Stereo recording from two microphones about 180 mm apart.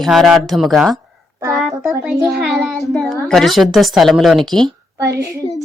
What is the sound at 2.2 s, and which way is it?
Speech, centre (ahead or behind).